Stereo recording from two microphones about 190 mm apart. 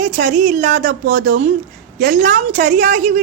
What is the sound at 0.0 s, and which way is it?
A woman's voice, 40° right (ahead or behind).